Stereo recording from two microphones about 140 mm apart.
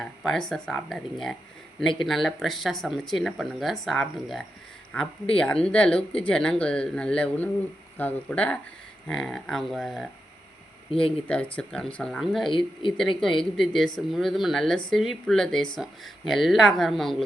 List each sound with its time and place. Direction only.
0.0 s speech: centre (ahead or behind)
12.5 s speech: 35° left (ahead or behind)
13.0 s speech: 5° left (ahead or behind)